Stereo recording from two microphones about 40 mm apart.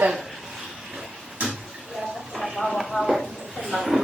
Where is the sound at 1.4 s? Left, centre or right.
Right.